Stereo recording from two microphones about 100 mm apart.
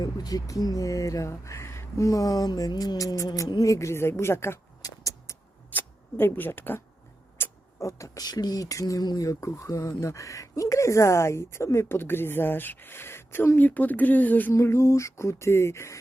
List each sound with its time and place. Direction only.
0.0 s speech: 40° left (ahead or behind)
5.7 s speech: 20° left (ahead or behind)
7.4 s a sound: 25° left (ahead or behind)
7.8 s speech: 30° left (ahead or behind)
14.5 s speech: 25° left (ahead or behind)